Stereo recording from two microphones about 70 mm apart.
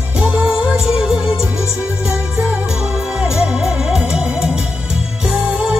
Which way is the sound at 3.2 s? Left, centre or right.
Centre.